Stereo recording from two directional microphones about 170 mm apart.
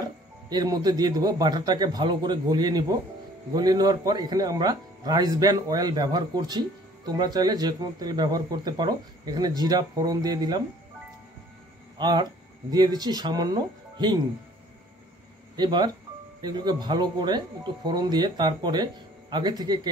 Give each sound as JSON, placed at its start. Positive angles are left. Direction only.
{"t": 0.0, "sound": "speech", "side_deg": -25}
{"t": 12.0, "sound": "speech", "side_deg": -25}
{"t": 15.5, "sound": "speech", "side_deg": -25}